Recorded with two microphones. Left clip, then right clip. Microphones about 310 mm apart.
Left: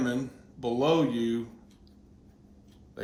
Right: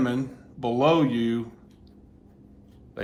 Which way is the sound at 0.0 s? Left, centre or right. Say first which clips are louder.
Right 4 dB; centre.